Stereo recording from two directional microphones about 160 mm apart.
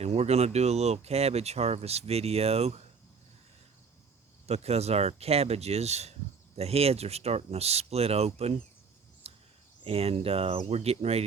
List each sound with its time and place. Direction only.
0.0 s speech: 40° right (ahead or behind)
4.4 s speech: 40° right (ahead or behind)
9.2 s a sound: 40° right (ahead or behind)
9.8 s speech: 35° right (ahead or behind)